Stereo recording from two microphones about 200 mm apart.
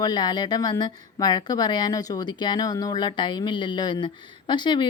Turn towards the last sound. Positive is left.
turn(degrees=20)  # may be behind; listen again after turning